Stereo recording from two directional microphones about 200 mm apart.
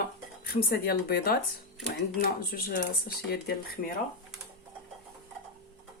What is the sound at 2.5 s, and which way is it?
Speech, 50° left (ahead or behind).